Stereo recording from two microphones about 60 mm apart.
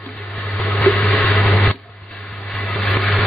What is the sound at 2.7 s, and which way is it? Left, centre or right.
Vehicle, centre.